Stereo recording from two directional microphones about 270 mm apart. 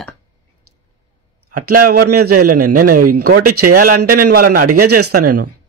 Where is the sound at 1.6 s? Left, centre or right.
Right.